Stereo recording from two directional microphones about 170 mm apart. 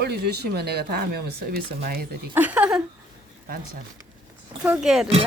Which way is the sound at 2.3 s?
10° right (ahead or behind).